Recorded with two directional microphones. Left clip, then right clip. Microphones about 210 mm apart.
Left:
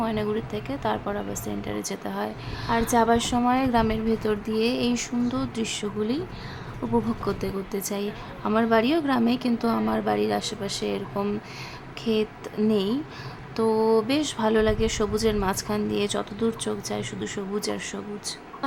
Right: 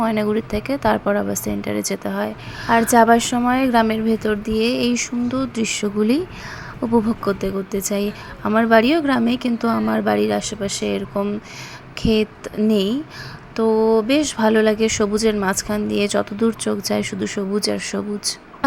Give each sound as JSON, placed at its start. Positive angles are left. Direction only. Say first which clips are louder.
{"t": 0.0, "sound": "a woman's voice", "louder": "right 7 dB", "side_deg": -20}